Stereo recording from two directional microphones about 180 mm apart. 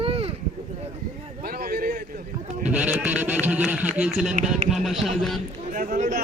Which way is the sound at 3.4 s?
5° right (ahead or behind).